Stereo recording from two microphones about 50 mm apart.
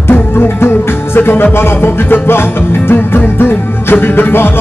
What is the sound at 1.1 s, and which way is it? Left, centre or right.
Music, left.